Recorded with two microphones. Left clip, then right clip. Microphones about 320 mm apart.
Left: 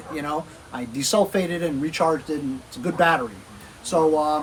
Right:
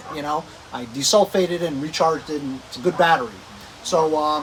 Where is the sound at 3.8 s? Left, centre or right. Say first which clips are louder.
Right 1 dB; centre.